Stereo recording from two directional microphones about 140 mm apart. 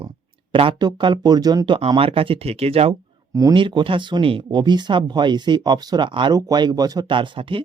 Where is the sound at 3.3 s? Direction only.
30° right (ahead or behind).